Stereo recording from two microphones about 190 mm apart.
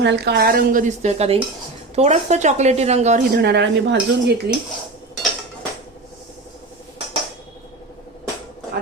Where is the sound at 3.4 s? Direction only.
65° right (ahead or behind).